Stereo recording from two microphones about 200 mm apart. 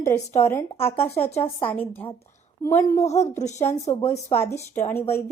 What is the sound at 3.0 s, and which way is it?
Speech, 35° left (ahead or behind).